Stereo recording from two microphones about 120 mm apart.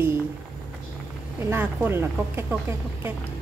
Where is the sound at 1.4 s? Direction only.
20° right (ahead or behind).